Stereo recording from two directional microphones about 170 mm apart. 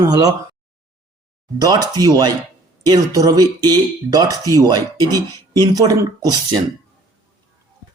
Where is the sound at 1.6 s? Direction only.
20° right (ahead or behind).